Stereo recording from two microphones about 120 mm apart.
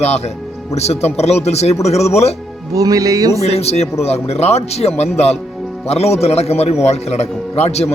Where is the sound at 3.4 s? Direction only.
60° left (ahead or behind).